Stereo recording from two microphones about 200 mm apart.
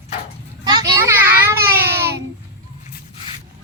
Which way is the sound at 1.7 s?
10° right (ahead or behind).